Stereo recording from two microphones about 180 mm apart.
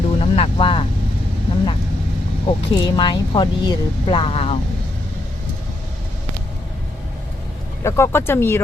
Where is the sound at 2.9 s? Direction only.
25° left (ahead or behind).